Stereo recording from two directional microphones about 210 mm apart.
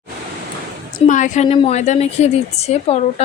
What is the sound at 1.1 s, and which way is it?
A woman's voice, 35° left (ahead or behind).